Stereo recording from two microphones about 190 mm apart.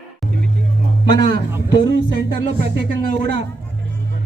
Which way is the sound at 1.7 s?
70° right (ahead or behind).